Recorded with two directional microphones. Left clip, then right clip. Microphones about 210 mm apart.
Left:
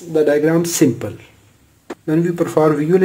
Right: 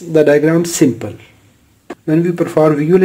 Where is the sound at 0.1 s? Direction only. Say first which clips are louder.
Right 5 dB; 20° right (ahead or behind).